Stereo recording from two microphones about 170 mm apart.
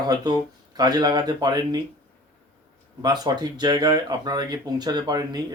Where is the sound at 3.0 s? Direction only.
25° right (ahead or behind).